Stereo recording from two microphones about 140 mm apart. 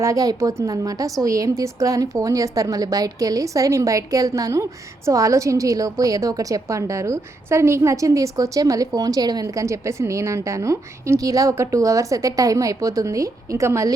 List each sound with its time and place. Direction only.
0.0 s a woman's voice: 25° right (ahead or behind)